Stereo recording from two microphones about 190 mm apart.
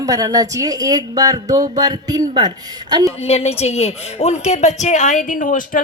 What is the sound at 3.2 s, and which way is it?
A woman's voice, 35° left (ahead or behind).